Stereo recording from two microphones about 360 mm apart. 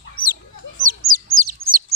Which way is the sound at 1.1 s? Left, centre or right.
Right.